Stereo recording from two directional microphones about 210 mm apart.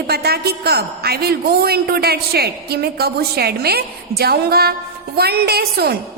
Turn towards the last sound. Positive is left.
turn(degrees=-50)  # may be behind; listen again after turning